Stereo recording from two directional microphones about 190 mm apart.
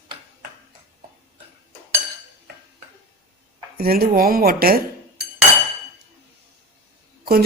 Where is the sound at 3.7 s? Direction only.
55° right (ahead or behind).